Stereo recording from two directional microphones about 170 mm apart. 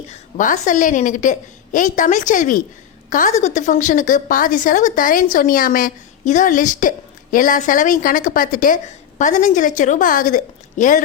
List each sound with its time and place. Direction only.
0.1 s a woman's voice: 45° left (ahead or behind)